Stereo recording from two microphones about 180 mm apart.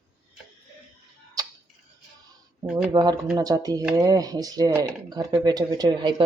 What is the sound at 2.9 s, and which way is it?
Speech, 20° right (ahead or behind).